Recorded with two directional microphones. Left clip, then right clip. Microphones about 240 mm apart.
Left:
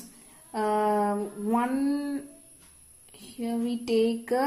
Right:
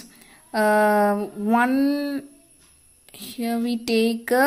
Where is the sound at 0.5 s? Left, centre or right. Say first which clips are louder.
Right 7 dB; right.